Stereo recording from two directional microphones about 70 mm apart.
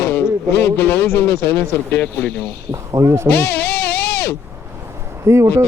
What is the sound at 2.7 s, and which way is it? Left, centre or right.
Speech, right.